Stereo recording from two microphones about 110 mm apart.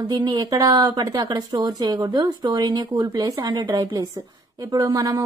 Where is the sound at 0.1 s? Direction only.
40° right (ahead or behind).